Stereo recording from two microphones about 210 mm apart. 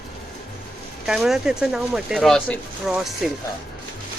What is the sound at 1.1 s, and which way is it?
Speech, centre (ahead or behind).